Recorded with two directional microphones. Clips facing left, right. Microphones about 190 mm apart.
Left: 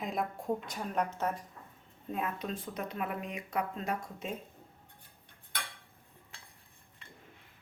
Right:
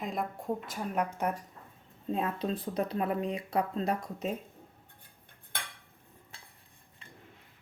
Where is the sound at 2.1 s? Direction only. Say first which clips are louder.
Right 4 dB; 30° right (ahead or behind).